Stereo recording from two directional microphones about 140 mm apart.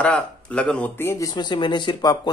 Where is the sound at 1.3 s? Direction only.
35° left (ahead or behind).